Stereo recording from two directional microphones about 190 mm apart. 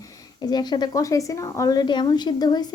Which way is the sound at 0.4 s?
20° left (ahead or behind).